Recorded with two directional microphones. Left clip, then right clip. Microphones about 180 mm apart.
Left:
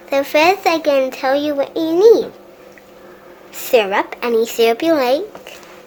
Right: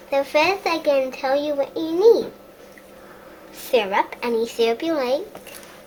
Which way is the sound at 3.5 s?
60° left (ahead or behind).